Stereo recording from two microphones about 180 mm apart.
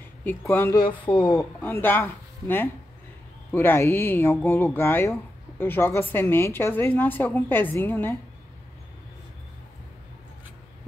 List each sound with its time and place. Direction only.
0.2 s a woman's voice: 10° left (ahead or behind)
0.8 s speech: 25° left (ahead or behind)
1.6 s a woman's voice: 10° left (ahead or behind)